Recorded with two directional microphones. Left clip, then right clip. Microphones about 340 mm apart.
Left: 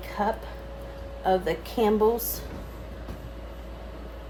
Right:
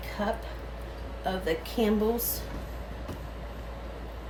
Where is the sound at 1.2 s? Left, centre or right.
Left.